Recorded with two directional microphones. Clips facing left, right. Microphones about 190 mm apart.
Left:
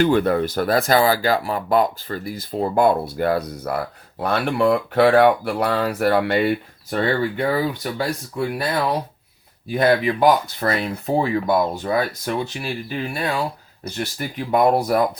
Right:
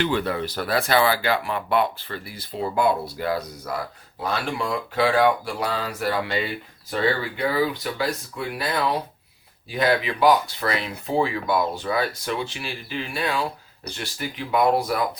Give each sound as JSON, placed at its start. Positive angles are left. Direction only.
{"t": 0.0, "sound": "speech", "side_deg": 50}